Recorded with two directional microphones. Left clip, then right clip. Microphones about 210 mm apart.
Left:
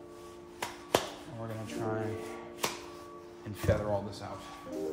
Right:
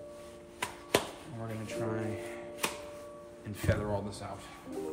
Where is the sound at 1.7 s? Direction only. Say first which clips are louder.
Even; 20° left (ahead or behind).